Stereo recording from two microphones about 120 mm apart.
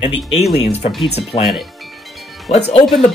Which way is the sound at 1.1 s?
60° left (ahead or behind).